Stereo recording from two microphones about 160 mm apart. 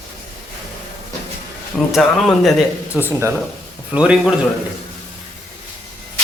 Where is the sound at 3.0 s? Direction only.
10° right (ahead or behind).